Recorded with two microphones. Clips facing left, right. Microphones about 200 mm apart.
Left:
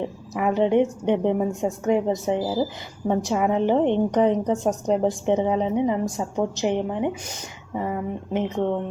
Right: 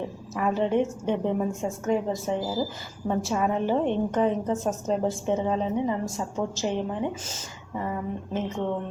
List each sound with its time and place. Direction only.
0.3 s a woman's voice: 15° left (ahead or behind)